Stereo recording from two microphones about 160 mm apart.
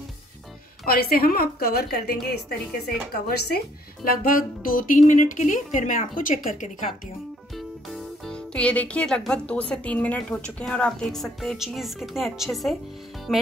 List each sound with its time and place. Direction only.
0.8 s a woman's voice: 70° left (ahead or behind)
3.3 s speech: 85° left; by 6.9 s 55° left (ahead or behind)
7.5 s speech: 5° left (ahead or behind)
13.3 s music: centre (ahead or behind)